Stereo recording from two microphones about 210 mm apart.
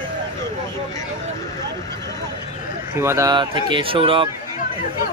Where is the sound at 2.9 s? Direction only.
10° right (ahead or behind).